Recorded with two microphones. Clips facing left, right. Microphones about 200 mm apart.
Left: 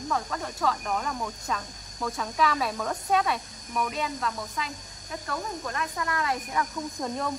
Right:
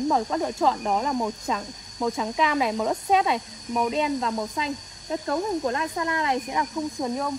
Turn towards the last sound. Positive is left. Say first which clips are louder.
# right 4 dB
turn(degrees=-20)  # may be behind; listen again after turning